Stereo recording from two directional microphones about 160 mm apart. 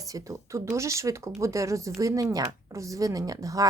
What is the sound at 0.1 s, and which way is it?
A woman's voice, 20° right (ahead or behind).